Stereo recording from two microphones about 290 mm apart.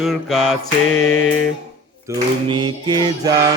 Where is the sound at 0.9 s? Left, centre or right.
Left.